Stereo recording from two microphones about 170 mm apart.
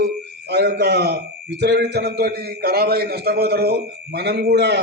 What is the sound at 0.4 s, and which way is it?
A man's voice, 75° right (ahead or behind).